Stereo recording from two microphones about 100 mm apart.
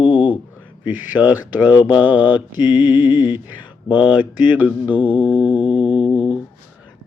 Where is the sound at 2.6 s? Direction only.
45° left (ahead or behind).